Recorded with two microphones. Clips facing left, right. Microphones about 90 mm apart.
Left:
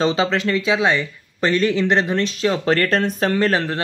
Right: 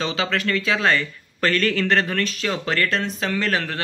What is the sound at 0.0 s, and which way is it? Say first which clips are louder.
Speech: left 5 dB; 30° left (ahead or behind).